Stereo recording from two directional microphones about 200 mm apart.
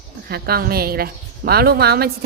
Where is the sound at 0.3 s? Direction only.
50° right (ahead or behind).